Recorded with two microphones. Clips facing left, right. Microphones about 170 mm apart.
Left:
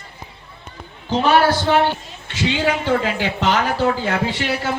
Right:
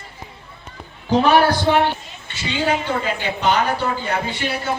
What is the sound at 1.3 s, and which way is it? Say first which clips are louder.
Speech: left 1 dB; 15° right (ahead or behind).